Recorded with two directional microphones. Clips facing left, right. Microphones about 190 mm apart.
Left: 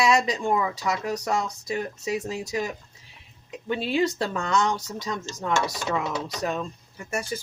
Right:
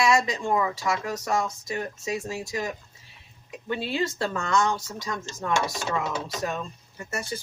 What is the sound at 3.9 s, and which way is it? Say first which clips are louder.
Speech: left 4 dB; 15° left (ahead or behind).